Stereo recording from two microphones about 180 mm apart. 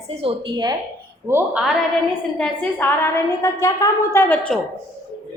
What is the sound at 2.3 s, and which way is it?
A woman's voice, 10° left (ahead or behind).